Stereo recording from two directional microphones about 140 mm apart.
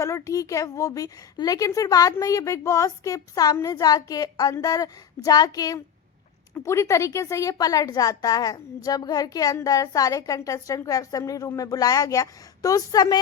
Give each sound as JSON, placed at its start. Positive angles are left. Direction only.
{"t": 0.0, "sound": "a woman's voice", "side_deg": 20}